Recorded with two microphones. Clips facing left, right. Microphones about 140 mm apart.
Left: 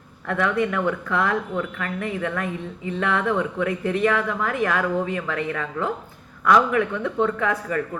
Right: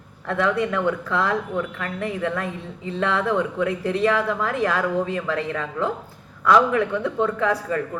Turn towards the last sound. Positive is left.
turn(degrees=-30)  # may be behind; listen again after turning